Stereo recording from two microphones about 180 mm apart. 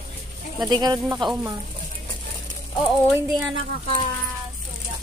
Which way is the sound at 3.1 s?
Centre (ahead or behind).